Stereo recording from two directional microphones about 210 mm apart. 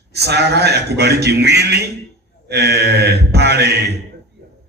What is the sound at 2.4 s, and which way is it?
Mantra, 50° right (ahead or behind).